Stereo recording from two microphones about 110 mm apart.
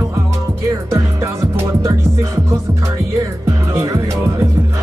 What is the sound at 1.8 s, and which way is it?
Music, 25° right (ahead or behind).